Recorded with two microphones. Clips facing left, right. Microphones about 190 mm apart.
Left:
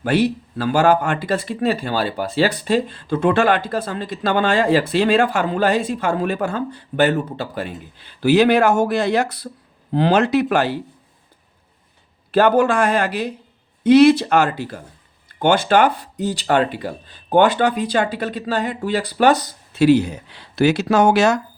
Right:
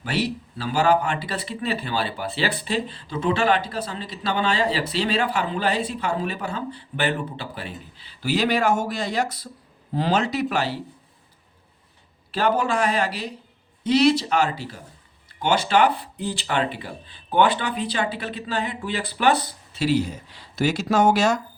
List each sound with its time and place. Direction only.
0.0 s speech: 55° left (ahead or behind)
12.3 s speech: 55° left (ahead or behind)
19.9 s speech: 65° left (ahead or behind)